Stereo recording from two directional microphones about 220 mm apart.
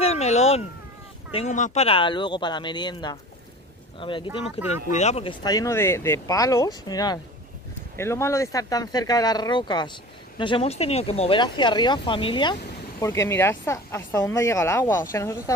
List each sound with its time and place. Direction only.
0.0 s cat: 30° left (ahead or behind)
1.3 s speech: 30° left (ahead or behind); by 15.5 s 15° left (ahead or behind)